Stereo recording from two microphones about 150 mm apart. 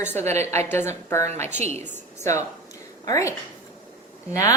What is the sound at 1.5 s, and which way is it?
Speech, 50° right (ahead or behind).